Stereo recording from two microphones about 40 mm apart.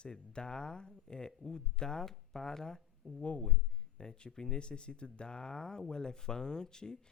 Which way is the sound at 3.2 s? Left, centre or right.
Left.